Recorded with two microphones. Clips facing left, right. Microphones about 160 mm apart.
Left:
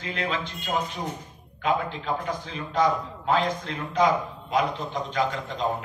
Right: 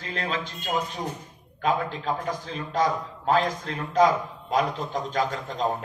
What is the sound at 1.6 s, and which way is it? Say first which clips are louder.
A man's voice: even; 40° right (ahead or behind).